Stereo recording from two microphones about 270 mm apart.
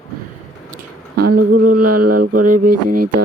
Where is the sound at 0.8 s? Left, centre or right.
Right.